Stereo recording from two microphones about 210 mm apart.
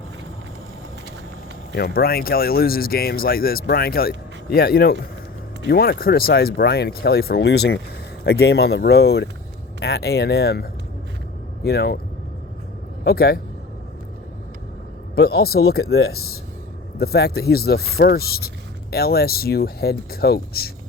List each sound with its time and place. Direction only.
1.7 s speech: 45° left (ahead or behind)
13.1 s speech: 50° left (ahead or behind)
15.1 s speech: 50° left (ahead or behind)
15.8 s speech: 85° left
17.0 s speech: 50° left (ahead or behind)